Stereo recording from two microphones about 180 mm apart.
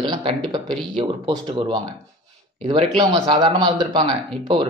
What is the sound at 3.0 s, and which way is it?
A man's voice, 25° right (ahead or behind).